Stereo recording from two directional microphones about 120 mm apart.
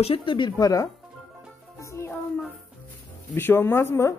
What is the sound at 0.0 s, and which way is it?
Speech, 50° left (ahead or behind).